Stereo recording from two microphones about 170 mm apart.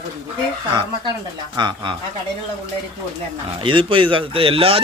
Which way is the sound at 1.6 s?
25° right (ahead or behind).